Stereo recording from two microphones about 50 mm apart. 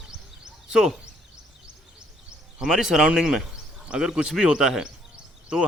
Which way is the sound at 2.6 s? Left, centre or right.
Centre.